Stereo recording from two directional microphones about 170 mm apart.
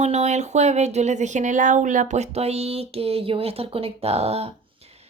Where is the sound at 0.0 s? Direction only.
40° right (ahead or behind).